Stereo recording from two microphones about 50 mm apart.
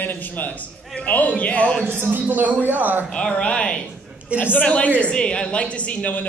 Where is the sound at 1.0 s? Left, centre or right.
Left.